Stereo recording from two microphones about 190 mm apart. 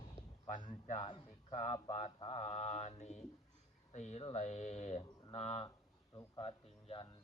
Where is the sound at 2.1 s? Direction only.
30° left (ahead or behind).